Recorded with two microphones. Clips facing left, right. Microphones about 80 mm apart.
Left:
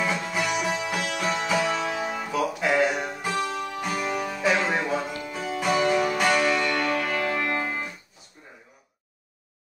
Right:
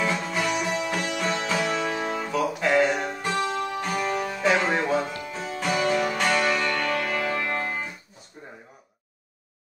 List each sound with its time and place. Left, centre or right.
0.0 s music: centre